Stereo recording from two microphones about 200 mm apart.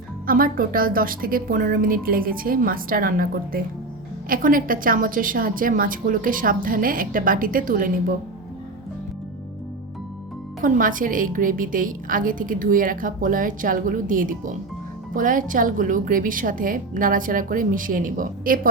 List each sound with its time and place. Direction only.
0.3 s a woman's voice: 45° right (ahead or behind)
10.6 s a woman's voice: 40° right (ahead or behind)